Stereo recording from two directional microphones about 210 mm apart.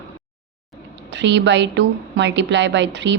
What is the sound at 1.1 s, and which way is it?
A woman's voice, 55° right (ahead or behind).